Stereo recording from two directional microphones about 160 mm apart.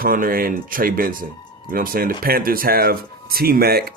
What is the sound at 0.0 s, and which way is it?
Speech, 60° right (ahead or behind).